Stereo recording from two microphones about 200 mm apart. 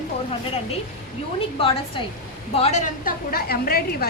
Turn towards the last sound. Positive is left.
turn(degrees=50)  # may be behind; listen again after turning